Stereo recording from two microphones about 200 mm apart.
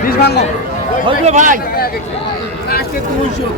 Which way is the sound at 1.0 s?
35° right (ahead or behind).